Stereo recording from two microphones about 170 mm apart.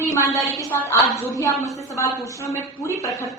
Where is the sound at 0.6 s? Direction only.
15° left (ahead or behind).